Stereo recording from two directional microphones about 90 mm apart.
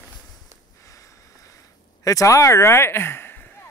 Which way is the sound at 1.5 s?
40° left (ahead or behind).